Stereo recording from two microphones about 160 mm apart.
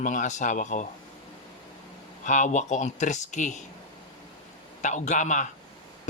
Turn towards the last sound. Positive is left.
turn(degrees=50)  # may be behind; listen again after turning